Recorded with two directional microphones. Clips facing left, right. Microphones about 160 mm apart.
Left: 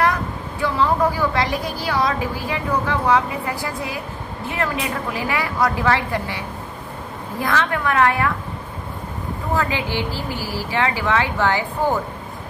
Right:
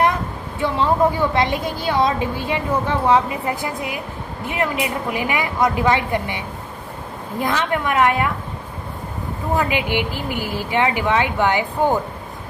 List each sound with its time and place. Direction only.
0.0 s a woman's voice: 25° right (ahead or behind)
9.5 s a woman's voice: 15° right (ahead or behind)